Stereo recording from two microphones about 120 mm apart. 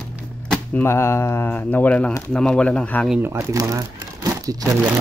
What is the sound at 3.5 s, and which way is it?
Speech, 30° right (ahead or behind).